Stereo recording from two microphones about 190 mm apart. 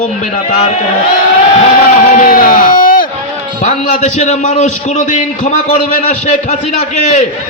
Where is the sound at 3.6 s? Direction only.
35° left (ahead or behind).